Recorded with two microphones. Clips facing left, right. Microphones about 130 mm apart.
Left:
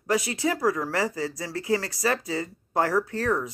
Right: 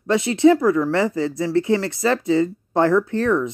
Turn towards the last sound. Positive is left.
turn(degrees=-25)  # may be behind; listen again after turning